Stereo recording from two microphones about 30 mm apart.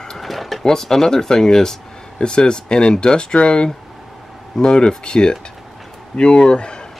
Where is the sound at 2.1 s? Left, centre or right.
Left.